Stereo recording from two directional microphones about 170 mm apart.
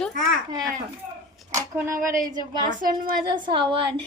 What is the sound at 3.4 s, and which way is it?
Speech, 25° right (ahead or behind).